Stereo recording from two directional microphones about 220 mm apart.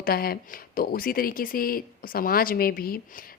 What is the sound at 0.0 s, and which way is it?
Speech, 40° left (ahead or behind).